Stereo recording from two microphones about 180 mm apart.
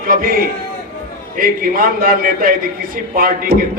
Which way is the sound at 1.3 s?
50° right (ahead or behind).